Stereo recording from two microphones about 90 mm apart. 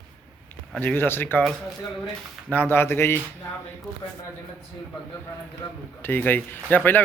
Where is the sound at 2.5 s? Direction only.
25° left (ahead or behind).